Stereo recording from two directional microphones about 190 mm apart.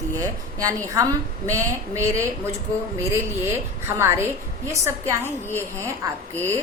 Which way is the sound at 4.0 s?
15° right (ahead or behind).